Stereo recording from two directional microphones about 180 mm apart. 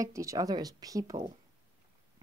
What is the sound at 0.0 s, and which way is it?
Speech, 15° right (ahead or behind).